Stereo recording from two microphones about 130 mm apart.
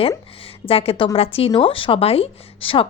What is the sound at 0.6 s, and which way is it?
Speech, 45° left (ahead or behind).